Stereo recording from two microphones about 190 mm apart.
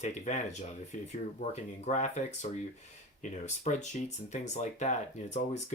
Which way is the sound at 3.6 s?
40° left (ahead or behind).